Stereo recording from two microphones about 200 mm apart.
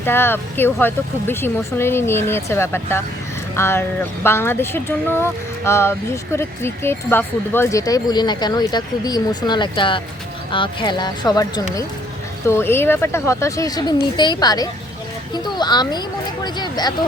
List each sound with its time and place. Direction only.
0.0 s speech: 10° left (ahead or behind)